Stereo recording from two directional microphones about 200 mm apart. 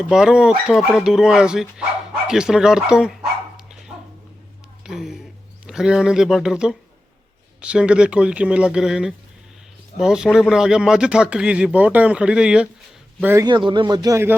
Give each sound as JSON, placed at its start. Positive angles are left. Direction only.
{"t": 0.0, "sound": "speech", "side_deg": -5}
{"t": 4.9, "sound": "speech", "side_deg": 0}
{"t": 13.5, "sound": "speech", "side_deg": -25}